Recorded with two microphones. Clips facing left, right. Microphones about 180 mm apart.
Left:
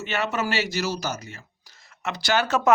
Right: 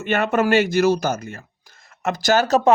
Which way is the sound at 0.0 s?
55° right (ahead or behind).